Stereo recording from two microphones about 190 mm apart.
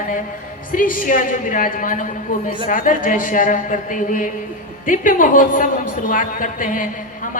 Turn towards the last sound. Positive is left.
turn(degrees=45)  # may be behind; listen again after turning